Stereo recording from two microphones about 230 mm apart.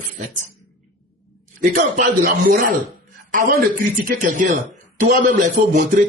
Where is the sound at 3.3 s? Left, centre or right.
Right.